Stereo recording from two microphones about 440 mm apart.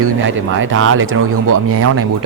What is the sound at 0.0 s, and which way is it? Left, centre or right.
A man's voice, right.